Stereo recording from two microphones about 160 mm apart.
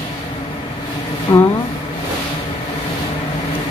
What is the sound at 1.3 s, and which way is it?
Speech, 30° left (ahead or behind).